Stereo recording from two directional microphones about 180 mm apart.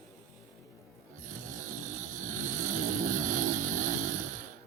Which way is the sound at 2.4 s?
45° right (ahead or behind).